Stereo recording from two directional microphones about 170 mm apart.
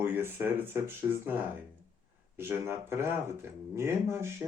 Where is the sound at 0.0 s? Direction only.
10° right (ahead or behind).